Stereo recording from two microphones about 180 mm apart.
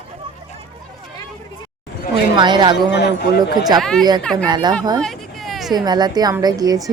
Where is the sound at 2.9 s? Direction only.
70° left (ahead or behind).